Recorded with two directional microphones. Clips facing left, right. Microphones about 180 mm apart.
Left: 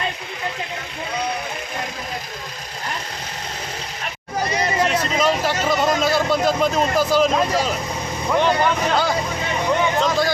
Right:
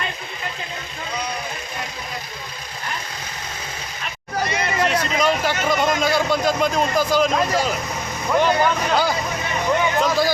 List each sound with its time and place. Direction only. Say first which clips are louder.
4.4 s hubbub: left 3 dB; 35° left (ahead or behind)
4.8 s vehicle: right 1 dB; 5° left (ahead or behind)
5.6 s speech: left 1 dB; centre (ahead or behind)